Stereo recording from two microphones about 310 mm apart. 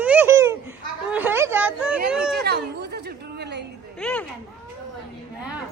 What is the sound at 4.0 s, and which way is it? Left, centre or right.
Speech, centre.